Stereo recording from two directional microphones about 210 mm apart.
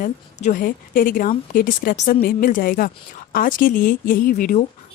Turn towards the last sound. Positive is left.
turn(degrees=40)  # may be behind; listen again after turning